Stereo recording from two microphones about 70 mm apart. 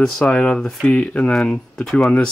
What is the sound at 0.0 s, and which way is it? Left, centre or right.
Speech, centre.